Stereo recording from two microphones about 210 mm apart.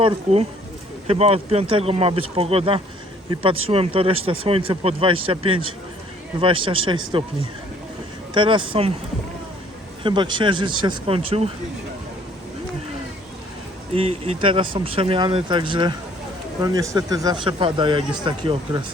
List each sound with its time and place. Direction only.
0.0 s speech: 30° right (ahead or behind)
8.3 s speech: 25° right (ahead or behind)
10.0 s speech: 20° right (ahead or behind)
13.9 s speech: 30° right (ahead or behind)